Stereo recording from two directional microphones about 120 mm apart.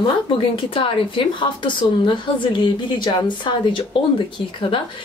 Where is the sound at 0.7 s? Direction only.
45° left (ahead or behind).